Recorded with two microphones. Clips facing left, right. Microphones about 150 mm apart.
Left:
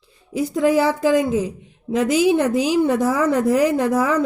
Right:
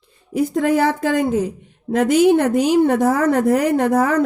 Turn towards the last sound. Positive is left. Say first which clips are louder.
# right 2 dB
turn(degrees=-55)  # may be behind; listen again after turning